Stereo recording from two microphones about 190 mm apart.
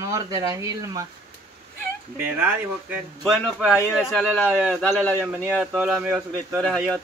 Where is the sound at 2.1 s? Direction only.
10° right (ahead or behind).